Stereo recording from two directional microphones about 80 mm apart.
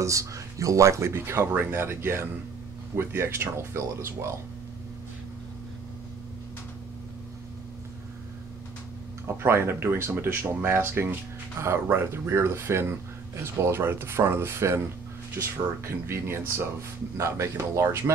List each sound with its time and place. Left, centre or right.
0.0 s speech: right
9.4 s speech: right